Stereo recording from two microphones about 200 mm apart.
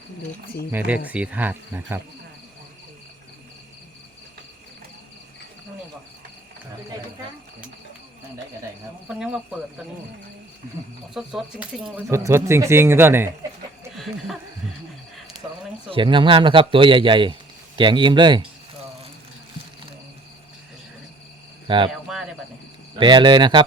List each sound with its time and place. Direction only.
1.0 s speech: 5° right (ahead or behind)
9.0 s speech: 5° right (ahead or behind)
11.1 s speech: 5° right (ahead or behind)
12.1 s speech: 15° right (ahead or behind)
13.9 s a sound: centre (ahead or behind)
15.9 s speech: 25° right (ahead or behind)
21.7 s speech: 25° right (ahead or behind)
23.0 s speech: 20° right (ahead or behind)